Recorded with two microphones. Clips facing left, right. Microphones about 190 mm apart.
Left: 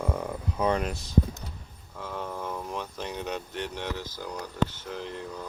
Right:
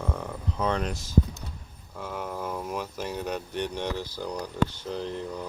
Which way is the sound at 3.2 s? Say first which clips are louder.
Right 3 dB; 15° right (ahead or behind).